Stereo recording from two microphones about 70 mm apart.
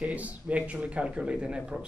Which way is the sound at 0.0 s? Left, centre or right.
Centre.